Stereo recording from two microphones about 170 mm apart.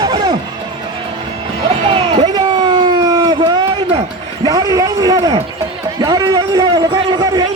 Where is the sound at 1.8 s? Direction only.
30° right (ahead or behind).